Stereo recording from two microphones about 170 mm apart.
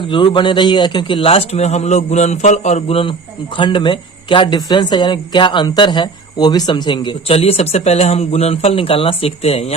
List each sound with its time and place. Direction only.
0.1 s a man's voice: 30° left (ahead or behind)